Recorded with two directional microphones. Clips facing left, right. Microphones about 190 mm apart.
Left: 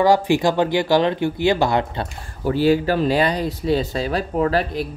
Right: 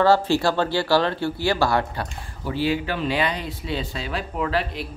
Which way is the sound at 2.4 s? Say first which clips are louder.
Left 7 dB; 45° left (ahead or behind).